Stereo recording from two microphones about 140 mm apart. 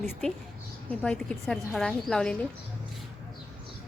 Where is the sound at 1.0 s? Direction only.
5° left (ahead or behind).